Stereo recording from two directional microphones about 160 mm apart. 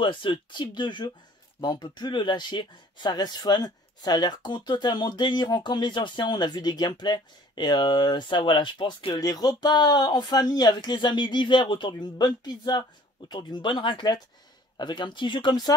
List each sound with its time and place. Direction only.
0.0 s speech: 30° left (ahead or behind)